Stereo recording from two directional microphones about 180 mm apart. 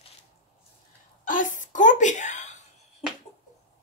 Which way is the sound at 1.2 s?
45° left (ahead or behind).